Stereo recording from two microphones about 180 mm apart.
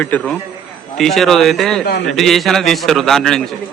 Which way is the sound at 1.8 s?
65° left (ahead or behind).